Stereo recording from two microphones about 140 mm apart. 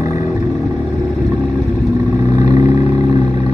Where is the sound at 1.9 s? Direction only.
20° right (ahead or behind).